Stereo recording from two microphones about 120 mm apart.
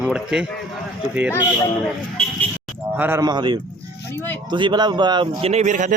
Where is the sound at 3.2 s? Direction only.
40° right (ahead or behind).